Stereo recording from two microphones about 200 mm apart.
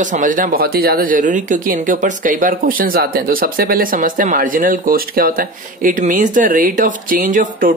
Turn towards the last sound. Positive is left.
turn(degrees=-40)  # may be behind; listen again after turning